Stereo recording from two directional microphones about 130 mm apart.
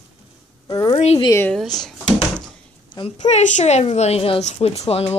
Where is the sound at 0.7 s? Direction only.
35° left (ahead or behind).